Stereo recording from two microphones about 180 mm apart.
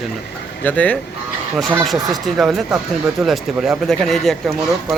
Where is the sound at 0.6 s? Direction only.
10° left (ahead or behind).